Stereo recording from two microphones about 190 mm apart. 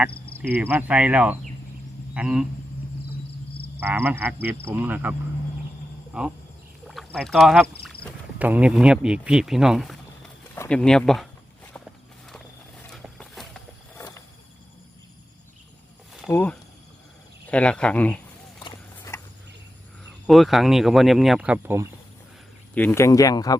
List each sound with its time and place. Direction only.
0.4 s speech: 10° right (ahead or behind)
3.8 s speech: 10° right (ahead or behind)
6.8 s speech: 5° left (ahead or behind)
12.9 s a sound: centre (ahead or behind)
16.3 s speech: 10° left (ahead or behind)
18.6 s horse: 20° left (ahead or behind)
20.2 s speech: centre (ahead or behind)
22.7 s speech: 10° left (ahead or behind)